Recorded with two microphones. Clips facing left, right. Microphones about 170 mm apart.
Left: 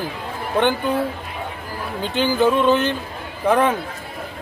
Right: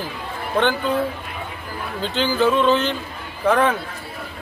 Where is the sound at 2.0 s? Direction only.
15° left (ahead or behind).